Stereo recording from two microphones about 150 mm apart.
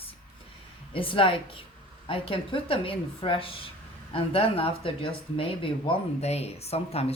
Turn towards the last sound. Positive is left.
turn(degrees=40)  # may be behind; listen again after turning